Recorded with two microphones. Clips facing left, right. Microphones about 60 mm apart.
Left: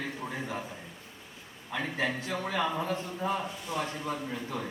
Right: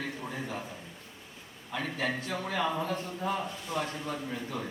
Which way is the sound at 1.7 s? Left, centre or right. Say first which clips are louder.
Left 1 dB; centre.